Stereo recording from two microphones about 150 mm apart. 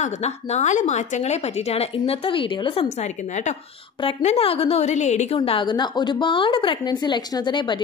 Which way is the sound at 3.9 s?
40° left (ahead or behind).